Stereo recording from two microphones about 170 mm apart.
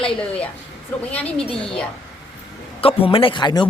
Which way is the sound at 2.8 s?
35° left (ahead or behind).